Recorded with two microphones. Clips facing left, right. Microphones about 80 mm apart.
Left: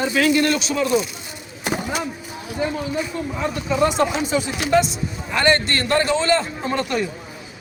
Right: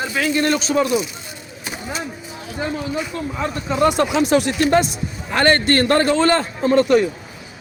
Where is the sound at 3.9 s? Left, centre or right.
Right.